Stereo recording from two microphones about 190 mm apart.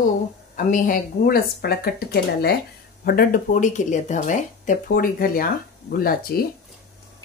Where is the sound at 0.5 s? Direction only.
45° left (ahead or behind).